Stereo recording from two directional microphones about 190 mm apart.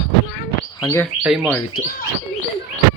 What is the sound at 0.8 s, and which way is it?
Speech, 15° left (ahead or behind).